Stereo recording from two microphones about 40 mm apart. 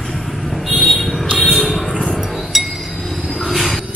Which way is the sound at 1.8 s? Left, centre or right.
Centre.